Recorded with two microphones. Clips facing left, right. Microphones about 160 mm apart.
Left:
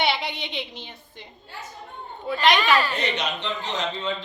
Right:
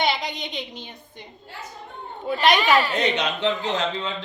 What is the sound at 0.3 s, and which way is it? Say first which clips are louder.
Speech: even; 45° right (ahead or behind).